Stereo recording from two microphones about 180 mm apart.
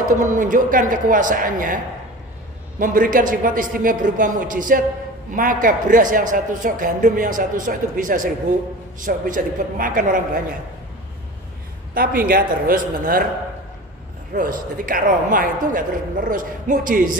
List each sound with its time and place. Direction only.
0.2 s a man's voice: 45° right (ahead or behind)
2.8 s a man's voice: 50° right (ahead or behind)
11.9 s a man's voice: 55° right (ahead or behind)
14.3 s a man's voice: 50° right (ahead or behind)